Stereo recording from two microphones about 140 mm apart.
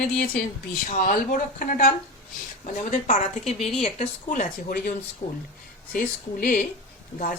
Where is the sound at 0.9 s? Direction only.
75° left (ahead or behind).